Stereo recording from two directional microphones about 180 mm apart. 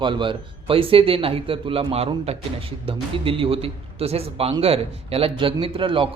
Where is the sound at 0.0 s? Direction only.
25° right (ahead or behind).